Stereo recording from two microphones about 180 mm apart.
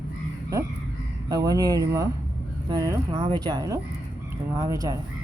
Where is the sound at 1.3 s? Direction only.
20° right (ahead or behind).